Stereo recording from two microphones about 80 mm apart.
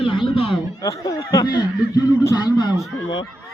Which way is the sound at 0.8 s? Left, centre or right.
Left.